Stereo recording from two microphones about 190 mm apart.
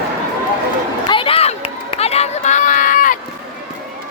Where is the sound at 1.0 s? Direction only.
30° left (ahead or behind).